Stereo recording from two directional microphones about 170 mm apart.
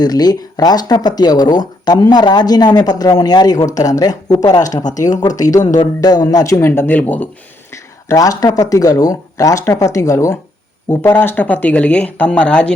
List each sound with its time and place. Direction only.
0.0 s speech: 25° left (ahead or behind)
4.8 s speech: 45° left (ahead or behind)
5.4 s speech: 20° left (ahead or behind)
8.1 s speech: 20° left (ahead or behind)